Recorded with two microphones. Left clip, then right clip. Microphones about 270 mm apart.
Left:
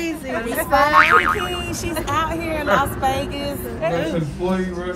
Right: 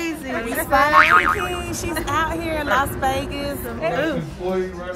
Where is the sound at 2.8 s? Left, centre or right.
Centre.